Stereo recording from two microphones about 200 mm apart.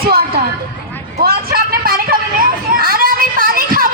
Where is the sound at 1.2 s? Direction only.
50° right (ahead or behind).